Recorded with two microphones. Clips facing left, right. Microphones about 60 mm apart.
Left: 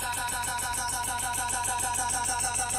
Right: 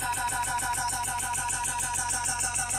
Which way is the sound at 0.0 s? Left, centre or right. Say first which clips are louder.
Right 2 dB; centre.